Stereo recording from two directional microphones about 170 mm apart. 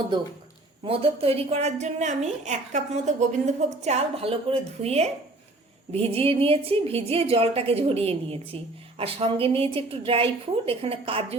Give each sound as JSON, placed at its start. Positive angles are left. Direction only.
{"t": 0.9, "sound": "a woman's voice", "side_deg": -35}